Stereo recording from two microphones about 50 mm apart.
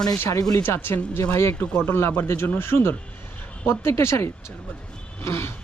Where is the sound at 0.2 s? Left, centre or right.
Left.